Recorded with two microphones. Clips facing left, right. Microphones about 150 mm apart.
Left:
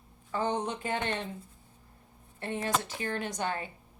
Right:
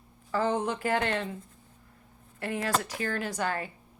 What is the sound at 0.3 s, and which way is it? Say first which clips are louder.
Speech: right 3 dB; 90° right.